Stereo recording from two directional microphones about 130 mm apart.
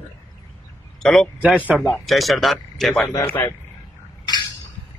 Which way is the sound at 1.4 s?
10° right (ahead or behind).